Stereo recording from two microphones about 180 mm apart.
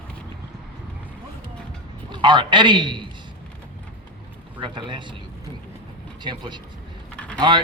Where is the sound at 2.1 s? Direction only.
25° right (ahead or behind).